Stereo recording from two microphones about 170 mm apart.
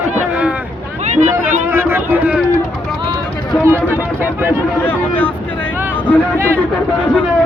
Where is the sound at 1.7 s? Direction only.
15° right (ahead or behind).